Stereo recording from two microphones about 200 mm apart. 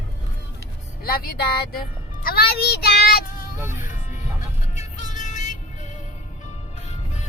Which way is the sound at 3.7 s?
40° left (ahead or behind).